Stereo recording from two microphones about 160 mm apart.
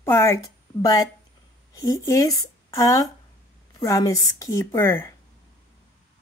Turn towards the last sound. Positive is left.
turn(degrees=15)  # may be behind; listen again after turning